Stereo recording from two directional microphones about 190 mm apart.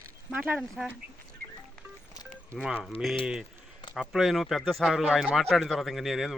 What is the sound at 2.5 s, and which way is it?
Speech, 5° right (ahead or behind).